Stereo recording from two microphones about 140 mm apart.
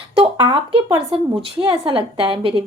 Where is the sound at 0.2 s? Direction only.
40° right (ahead or behind).